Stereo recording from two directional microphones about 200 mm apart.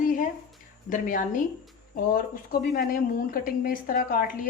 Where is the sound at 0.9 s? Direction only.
40° left (ahead or behind).